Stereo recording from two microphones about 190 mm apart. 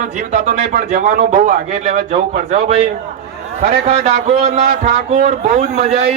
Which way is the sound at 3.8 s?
30° right (ahead or behind).